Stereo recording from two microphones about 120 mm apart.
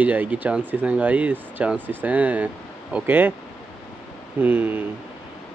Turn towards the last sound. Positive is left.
turn(degrees=-15)  # may be behind; listen again after turning